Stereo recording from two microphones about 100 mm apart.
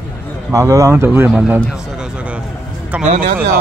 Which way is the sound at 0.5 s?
35° right (ahead or behind).